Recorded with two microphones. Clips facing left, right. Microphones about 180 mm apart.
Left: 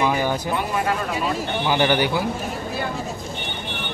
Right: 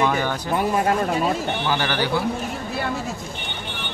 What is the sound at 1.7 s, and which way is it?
Speech, 15° left (ahead or behind).